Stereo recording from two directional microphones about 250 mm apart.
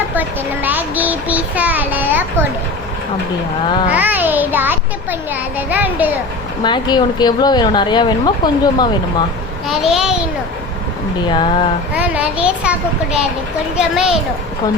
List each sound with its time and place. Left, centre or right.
0.2 s a child's voice: centre
3.9 s child singing: centre
5.3 s a child's voice: centre
6.6 s a woman's voice: centre
9.6 s a child's voice: centre
11.3 s speech: centre
11.9 s a child's voice: centre
13.7 s a child's voice: centre